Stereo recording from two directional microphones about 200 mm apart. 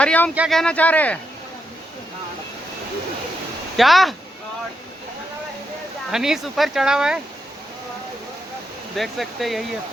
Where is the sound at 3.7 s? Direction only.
Centre (ahead or behind).